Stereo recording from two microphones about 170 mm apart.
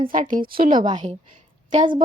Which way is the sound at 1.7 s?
30° right (ahead or behind).